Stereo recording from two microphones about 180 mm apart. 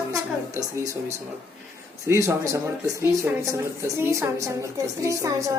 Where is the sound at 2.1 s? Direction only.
15° right (ahead or behind).